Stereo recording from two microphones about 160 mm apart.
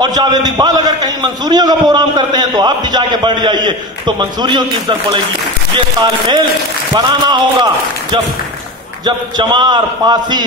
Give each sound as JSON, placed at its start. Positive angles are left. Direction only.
{"t": 0.0, "sound": "a man's voice", "side_deg": -25}
{"t": 9.0, "sound": "a man's voice", "side_deg": -30}